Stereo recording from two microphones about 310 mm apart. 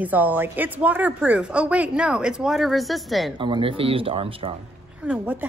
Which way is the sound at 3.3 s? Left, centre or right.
Centre.